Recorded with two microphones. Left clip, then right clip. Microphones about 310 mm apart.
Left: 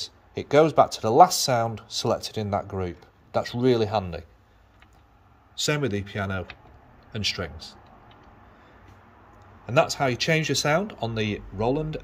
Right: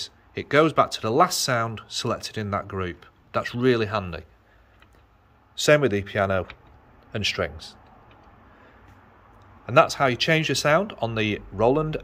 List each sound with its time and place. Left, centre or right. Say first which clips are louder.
0.0 s speech: even; centre
5.6 s speech: right 7 dB; centre
9.7 s speech: right 4 dB; centre